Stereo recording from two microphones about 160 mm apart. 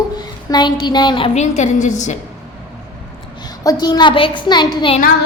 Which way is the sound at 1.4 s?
45° left (ahead or behind).